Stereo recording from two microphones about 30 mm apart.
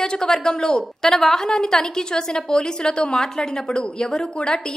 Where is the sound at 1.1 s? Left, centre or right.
Centre.